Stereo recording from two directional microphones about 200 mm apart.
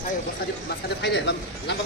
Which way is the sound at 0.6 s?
60° left (ahead or behind).